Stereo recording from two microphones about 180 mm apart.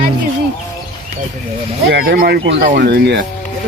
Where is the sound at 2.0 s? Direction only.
60° right (ahead or behind).